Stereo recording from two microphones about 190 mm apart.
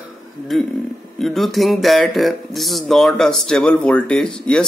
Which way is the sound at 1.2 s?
Centre (ahead or behind).